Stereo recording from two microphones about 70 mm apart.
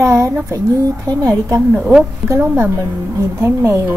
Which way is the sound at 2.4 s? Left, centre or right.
Right.